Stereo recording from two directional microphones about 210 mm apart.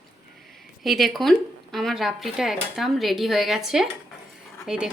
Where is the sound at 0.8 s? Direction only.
Centre (ahead or behind).